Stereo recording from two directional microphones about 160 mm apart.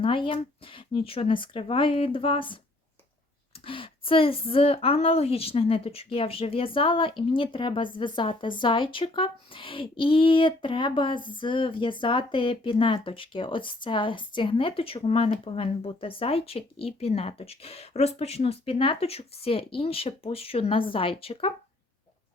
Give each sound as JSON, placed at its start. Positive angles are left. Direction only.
{"t": 0.0, "sound": "speech", "side_deg": 30}
{"t": 3.7, "sound": "speech", "side_deg": 35}